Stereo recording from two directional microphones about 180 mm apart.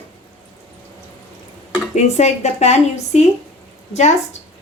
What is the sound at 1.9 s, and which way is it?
A woman's voice, 40° left (ahead or behind).